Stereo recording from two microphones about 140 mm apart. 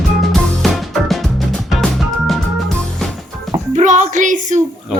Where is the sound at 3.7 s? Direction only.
60° right (ahead or behind).